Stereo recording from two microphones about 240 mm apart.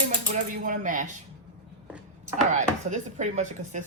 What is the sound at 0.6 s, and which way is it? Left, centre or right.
Speech, right.